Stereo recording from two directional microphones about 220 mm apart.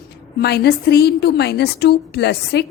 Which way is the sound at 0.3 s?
50° left (ahead or behind).